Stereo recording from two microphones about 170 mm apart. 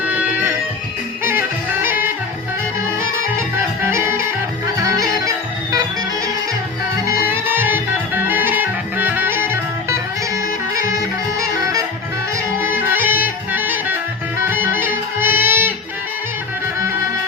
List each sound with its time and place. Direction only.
0.1 s music: 10° right (ahead or behind)
3.8 s music: 15° right (ahead or behind)
7.3 s music: 10° right (ahead or behind)
12.5 s clarinet: 10° right (ahead or behind)
14.4 s music: 10° right (ahead or behind)